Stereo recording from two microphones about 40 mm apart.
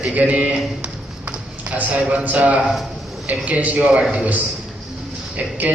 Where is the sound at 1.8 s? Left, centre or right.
Right.